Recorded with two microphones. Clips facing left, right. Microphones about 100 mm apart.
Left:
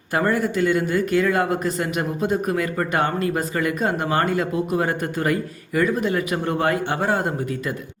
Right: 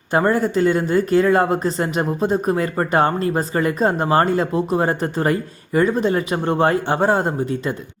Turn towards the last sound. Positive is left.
turn(degrees=-30)  # may be behind; listen again after turning